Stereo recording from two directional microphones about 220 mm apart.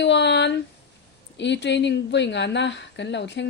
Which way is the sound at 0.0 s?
50° left (ahead or behind).